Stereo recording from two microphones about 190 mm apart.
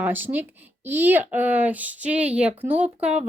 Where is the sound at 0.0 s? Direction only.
10° right (ahead or behind).